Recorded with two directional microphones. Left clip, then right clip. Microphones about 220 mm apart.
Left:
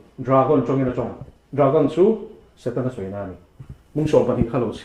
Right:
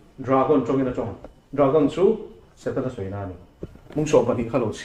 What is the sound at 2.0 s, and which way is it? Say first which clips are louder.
Speech: left 2 dB; 40° left (ahead or behind).